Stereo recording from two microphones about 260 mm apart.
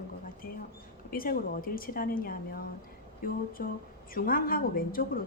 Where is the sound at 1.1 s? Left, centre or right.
Left.